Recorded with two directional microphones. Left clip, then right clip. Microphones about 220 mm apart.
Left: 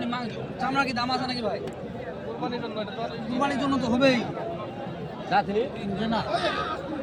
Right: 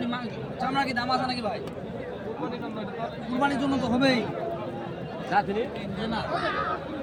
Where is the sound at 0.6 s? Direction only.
25° left (ahead or behind).